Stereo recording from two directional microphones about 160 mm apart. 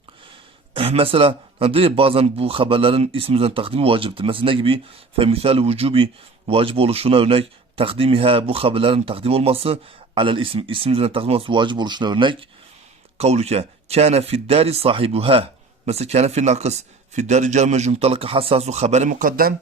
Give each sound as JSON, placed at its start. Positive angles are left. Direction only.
{"t": 0.7, "sound": "speech", "side_deg": -35}
{"t": 13.1, "sound": "a man's voice", "side_deg": -40}